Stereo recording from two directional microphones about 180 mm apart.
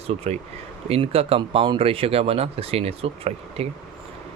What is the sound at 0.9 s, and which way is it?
Speech, 30° right (ahead or behind).